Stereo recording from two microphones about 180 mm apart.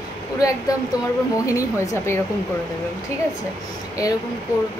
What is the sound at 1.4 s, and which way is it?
Speech, 20° left (ahead or behind).